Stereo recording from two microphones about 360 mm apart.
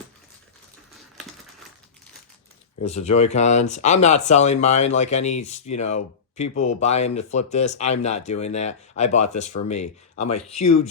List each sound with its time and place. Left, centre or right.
2.8 s speech: centre